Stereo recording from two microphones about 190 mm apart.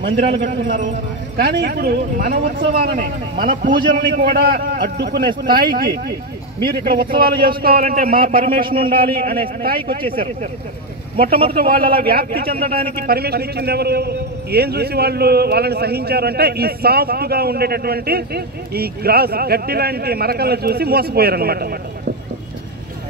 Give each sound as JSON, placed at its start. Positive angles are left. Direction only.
{"t": 0.0, "sound": "a man's voice", "side_deg": -60}
{"t": 11.1, "sound": "a man's voice", "side_deg": -50}